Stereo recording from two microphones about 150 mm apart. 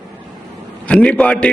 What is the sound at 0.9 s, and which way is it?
Speech, 10° left (ahead or behind).